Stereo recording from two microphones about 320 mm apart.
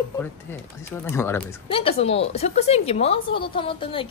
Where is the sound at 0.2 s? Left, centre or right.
Centre.